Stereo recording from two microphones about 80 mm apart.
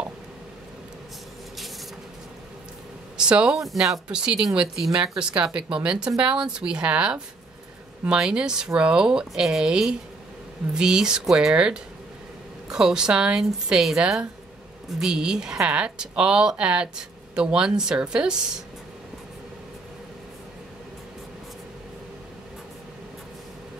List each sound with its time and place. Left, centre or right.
3.2 s speech: centre